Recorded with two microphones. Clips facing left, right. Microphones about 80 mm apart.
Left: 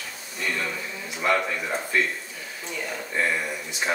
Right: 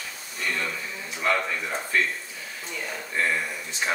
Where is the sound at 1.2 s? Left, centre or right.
Centre.